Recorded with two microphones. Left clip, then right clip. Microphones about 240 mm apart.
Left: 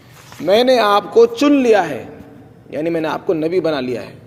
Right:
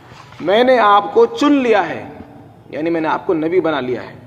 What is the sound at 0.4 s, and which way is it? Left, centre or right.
A man's voice, left.